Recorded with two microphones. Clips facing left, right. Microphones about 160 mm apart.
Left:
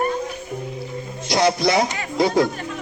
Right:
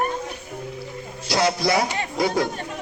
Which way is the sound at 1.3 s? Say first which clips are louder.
Left 3 dB; 20° left (ahead or behind).